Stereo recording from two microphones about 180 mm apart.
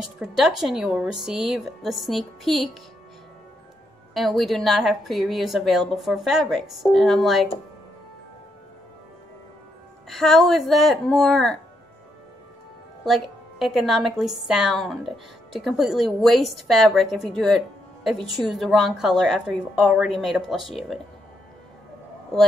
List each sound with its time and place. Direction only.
0.0 s a woman's voice: 5° right (ahead or behind)
4.1 s a woman's voice: centre (ahead or behind)
10.0 s a woman's voice: centre (ahead or behind)
13.0 s a woman's voice: centre (ahead or behind)